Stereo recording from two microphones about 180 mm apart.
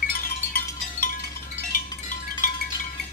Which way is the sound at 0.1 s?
55° left (ahead or behind).